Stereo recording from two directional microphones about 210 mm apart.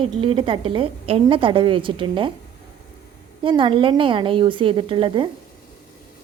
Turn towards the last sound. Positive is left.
turn(degrees=-25)  # may be behind; listen again after turning